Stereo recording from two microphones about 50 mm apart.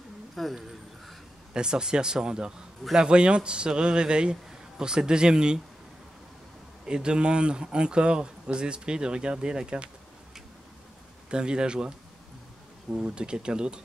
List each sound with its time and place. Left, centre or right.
0.4 s a sound: centre
1.5 s speech: centre
6.9 s speech: centre
11.2 s speech: centre
12.9 s speech: centre